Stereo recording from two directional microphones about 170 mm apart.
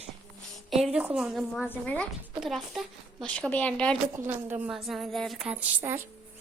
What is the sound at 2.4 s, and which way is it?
A woman's voice, centre (ahead or behind).